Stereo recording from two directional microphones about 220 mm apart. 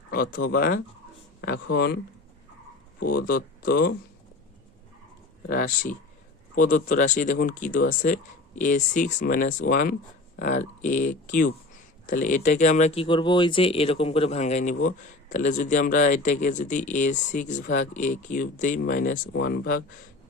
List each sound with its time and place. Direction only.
0.1 s speech: 40° left (ahead or behind)
3.0 s speech: 40° left (ahead or behind)
5.5 s speech: 40° left (ahead or behind)